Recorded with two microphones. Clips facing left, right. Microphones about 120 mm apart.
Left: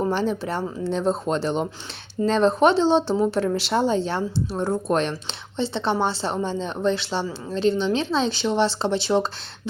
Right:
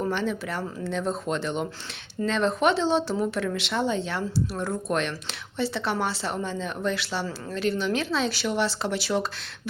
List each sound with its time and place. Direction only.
0.0 s speech: 35° left (ahead or behind)